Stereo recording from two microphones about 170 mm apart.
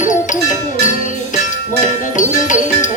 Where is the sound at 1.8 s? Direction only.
50° left (ahead or behind).